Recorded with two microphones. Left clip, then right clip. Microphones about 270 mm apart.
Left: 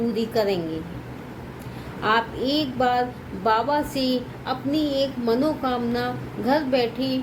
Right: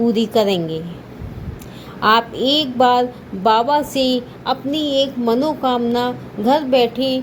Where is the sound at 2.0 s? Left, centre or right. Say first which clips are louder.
Right 7 dB; right.